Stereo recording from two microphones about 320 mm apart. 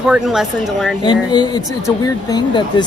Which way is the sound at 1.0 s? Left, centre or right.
Centre.